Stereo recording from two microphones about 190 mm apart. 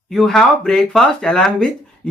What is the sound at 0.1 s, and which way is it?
Speech, centre (ahead or behind).